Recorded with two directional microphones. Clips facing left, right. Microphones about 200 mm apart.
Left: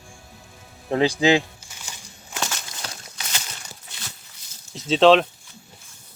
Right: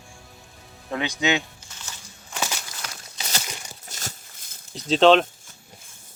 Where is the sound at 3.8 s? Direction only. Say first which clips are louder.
Right 7 dB; 45° right (ahead or behind).